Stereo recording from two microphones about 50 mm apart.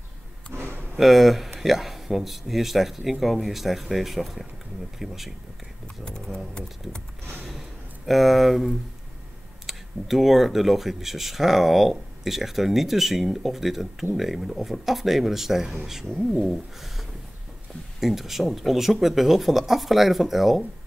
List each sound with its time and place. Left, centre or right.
0.5 s a sound: right
0.9 s speech: centre
8.1 s speech: centre
18.0 s speech: centre